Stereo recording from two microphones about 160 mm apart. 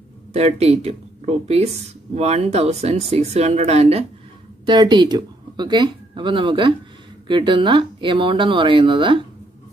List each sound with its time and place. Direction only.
0.3 s speech: 40° right (ahead or behind)
4.6 s speech: 25° right (ahead or behind)